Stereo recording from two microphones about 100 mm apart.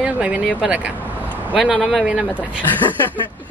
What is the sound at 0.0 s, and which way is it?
Speech, 10° right (ahead or behind).